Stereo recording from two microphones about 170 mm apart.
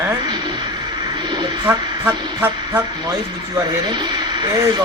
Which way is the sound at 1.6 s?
10° right (ahead or behind).